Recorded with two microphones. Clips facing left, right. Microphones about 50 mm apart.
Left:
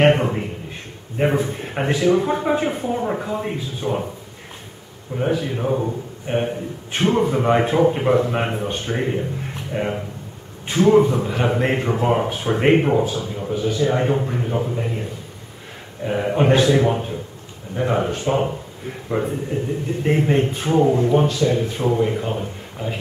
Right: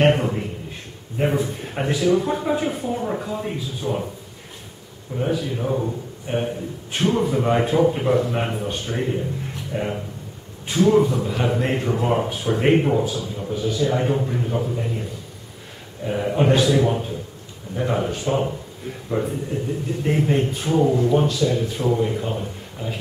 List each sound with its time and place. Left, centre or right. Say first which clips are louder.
0.0 s a sound: left 2 dB; left
1.2 s a man's voice: left 2 dB; left
5.2 s a man's voice: left 2 dB; left
16.1 s a man's voice: left 2 dB; left
21.4 s a man's voice: left 2 dB; left